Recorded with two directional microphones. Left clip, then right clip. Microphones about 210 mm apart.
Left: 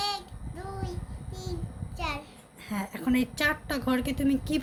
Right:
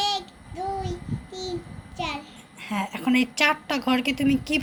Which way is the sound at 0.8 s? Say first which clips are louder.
Right 7 dB; 20° left (ahead or behind).